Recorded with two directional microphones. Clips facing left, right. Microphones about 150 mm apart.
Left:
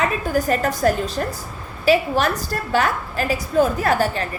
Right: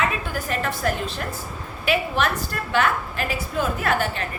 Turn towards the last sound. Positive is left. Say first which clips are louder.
# left 4 dB
turn(degrees=35)  # may be behind; listen again after turning